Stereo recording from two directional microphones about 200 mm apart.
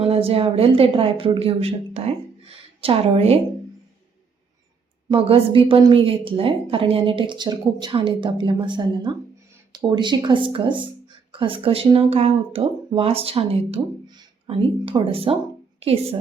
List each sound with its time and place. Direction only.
0.0 s a woman's voice: 30° right (ahead or behind)
5.0 s a woman's voice: 25° right (ahead or behind)